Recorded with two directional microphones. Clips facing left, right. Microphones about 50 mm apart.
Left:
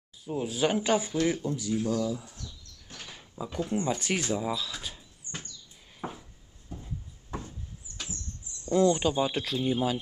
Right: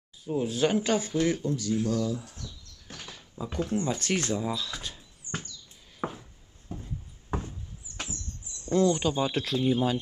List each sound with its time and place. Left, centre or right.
0.2 s speech: centre
3.6 s speech: centre
5.3 s rodents: right
6.0 s a sound: right
7.3 s a sound: right
8.7 s speech: centre